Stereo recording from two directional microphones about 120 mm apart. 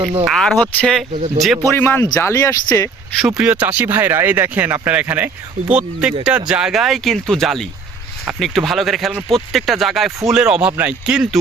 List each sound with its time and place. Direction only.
0.0 s speech: 45° right (ahead or behind)
0.3 s speech: 5° left (ahead or behind)
1.7 s speech: 15° left (ahead or behind)
3.2 s speech: 5° right (ahead or behind)